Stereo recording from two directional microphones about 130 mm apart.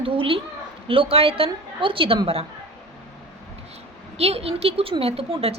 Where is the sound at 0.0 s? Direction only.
45° right (ahead or behind).